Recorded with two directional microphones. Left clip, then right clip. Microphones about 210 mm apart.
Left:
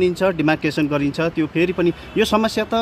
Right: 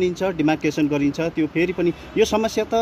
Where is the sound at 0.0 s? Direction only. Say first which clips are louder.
Left 3 dB; 35° left (ahead or behind).